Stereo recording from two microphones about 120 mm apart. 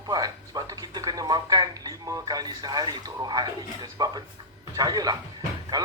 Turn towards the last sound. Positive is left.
turn(degrees=-35)  # may be behind; listen again after turning